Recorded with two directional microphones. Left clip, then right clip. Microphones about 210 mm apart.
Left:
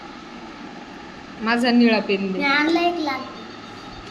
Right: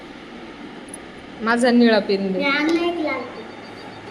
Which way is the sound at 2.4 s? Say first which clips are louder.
Left 3 dB; 30° left (ahead or behind).